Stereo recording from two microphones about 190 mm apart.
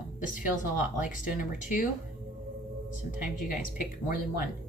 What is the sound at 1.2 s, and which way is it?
Speech, 45° left (ahead or behind).